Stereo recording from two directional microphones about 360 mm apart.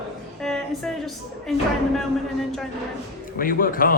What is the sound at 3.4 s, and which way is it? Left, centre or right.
Speech, left.